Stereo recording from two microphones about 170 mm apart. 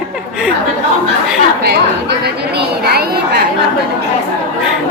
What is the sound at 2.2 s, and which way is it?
A woman's voice, 70° right (ahead or behind).